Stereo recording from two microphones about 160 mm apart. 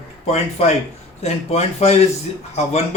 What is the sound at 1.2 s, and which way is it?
Speech, 40° left (ahead or behind).